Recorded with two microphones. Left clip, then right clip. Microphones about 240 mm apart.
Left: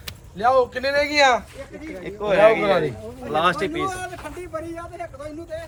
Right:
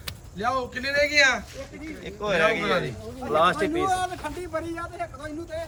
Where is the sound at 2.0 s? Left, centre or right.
Left.